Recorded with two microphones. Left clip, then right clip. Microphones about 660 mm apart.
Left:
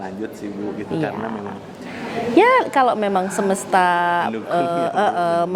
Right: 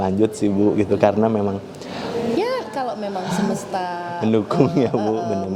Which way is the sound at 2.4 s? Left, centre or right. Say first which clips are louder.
Left 9 dB; left.